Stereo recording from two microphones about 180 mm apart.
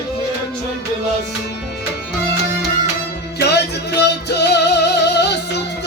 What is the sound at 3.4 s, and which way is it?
Music, 70° left (ahead or behind).